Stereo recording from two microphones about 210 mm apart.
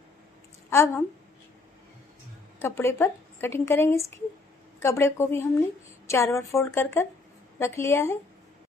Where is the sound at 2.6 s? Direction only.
10° left (ahead or behind).